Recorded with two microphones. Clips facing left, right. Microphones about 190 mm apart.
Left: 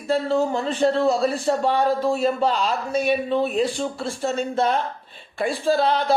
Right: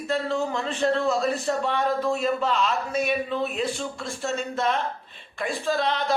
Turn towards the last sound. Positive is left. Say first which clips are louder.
# left 5 dB
turn(degrees=35)  # may be behind; listen again after turning